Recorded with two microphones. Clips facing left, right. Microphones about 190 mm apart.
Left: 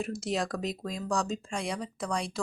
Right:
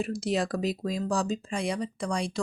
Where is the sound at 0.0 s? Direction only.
Centre (ahead or behind).